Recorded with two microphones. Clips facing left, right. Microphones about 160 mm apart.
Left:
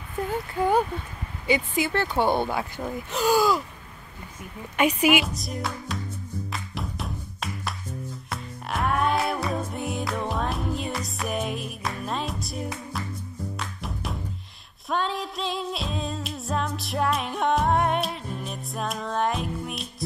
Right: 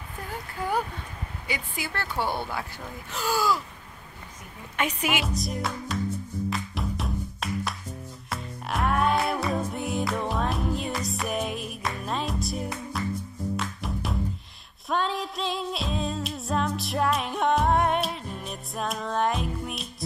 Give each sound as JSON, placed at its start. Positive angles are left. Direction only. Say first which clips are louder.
{"t": 1.5, "sound": "speech", "louder": "left 10 dB", "side_deg": 20}
{"t": 4.7, "sound": "a woman's voice", "louder": "left 7 dB", "side_deg": 10}
{"t": 5.2, "sound": "music", "louder": "right 1 dB", "side_deg": 0}